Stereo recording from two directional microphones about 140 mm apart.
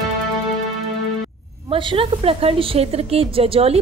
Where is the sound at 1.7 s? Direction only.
40° right (ahead or behind).